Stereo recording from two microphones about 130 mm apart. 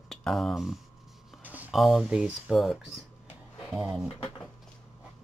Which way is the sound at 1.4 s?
10° right (ahead or behind).